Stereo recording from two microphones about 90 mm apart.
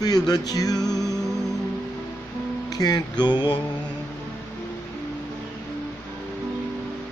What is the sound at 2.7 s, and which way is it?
Speech, 45° left (ahead or behind).